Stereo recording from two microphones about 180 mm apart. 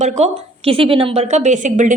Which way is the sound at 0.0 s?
40° right (ahead or behind).